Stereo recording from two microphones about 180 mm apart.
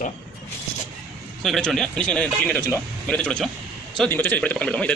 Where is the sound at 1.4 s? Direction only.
Centre (ahead or behind).